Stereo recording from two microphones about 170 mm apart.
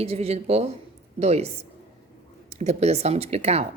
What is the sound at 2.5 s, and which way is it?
A woman's voice, 40° right (ahead or behind).